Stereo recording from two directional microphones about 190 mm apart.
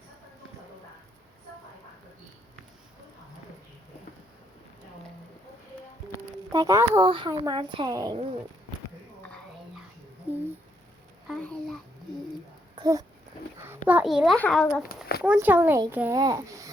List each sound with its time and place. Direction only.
6.5 s speech: 15° right (ahead or behind)
7.1 s a woman's voice: 25° right (ahead or behind)
11.3 s babbling: 5° left (ahead or behind)
12.7 s a sound: 20° right (ahead or behind)
13.8 s a child's voice: 5° right (ahead or behind)
15.2 s a child's voice: 10° right (ahead or behind)